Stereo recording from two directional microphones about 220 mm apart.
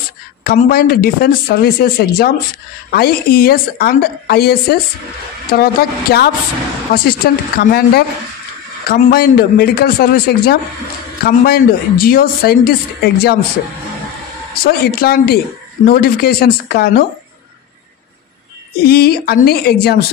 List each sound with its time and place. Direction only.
0.4 s speech: 40° left (ahead or behind)
14.5 s speech: 40° left (ahead or behind)
18.9 s speech: 45° left (ahead or behind)